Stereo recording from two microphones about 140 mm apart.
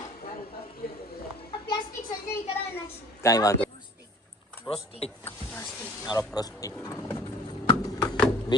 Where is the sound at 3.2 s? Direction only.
25° left (ahead or behind).